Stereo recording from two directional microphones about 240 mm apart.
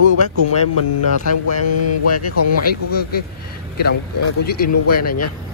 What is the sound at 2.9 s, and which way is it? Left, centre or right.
Speech, left.